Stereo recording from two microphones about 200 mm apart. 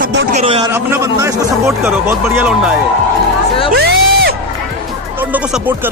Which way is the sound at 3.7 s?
55° right (ahead or behind).